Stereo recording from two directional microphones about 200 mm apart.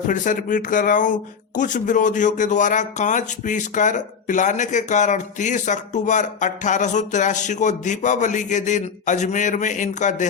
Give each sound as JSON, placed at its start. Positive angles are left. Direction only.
{"t": 0.1, "sound": "speech", "side_deg": 40}